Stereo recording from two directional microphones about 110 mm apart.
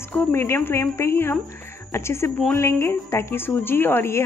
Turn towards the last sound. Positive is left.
turn(degrees=25)  # may be behind; listen again after turning